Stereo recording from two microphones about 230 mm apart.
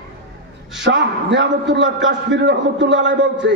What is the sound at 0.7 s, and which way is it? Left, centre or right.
A man's voice, right.